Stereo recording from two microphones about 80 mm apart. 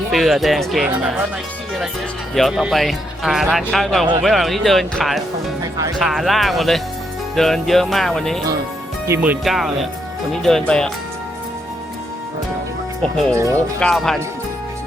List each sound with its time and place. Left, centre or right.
0.1 s speech: centre
0.9 s speech: centre
2.3 s speech: centre
5.7 s speech: right
6.0 s speech: centre
9.4 s speech: centre
10.4 s speech: centre
13.0 s speech: centre
13.3 s speech: right
13.9 s speech: centre